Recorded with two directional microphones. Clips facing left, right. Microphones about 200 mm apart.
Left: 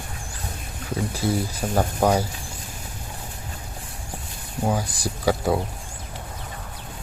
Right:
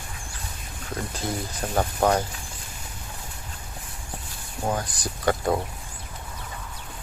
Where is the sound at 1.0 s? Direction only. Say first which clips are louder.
Left 6 dB; 10° left (ahead or behind).